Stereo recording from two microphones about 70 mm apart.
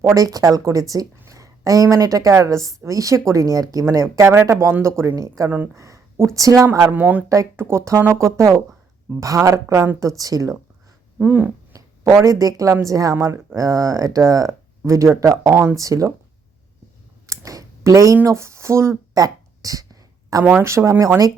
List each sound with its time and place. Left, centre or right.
0.1 s a woman's voice: right
4.1 s speech: right
6.9 s speech: right
7.5 s speech: right
10.2 s speech: right
11.2 s speech: right
11.7 s speech: right
13.1 s speech: right
17.2 s a sound: right
18.3 s speech: right
19.1 s a sound: right
20.4 s speech: right
20.7 s speech: right